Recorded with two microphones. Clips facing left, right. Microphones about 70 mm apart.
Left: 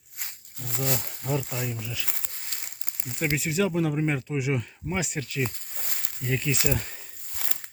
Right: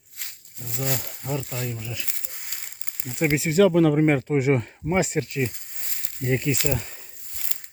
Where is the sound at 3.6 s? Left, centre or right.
Right.